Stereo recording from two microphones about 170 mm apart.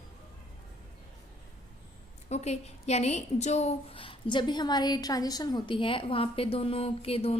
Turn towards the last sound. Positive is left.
turn(degrees=35)  # may be behind; listen again after turning